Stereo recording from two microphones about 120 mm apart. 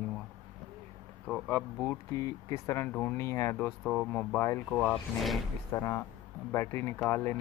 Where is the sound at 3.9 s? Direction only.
10° left (ahead or behind).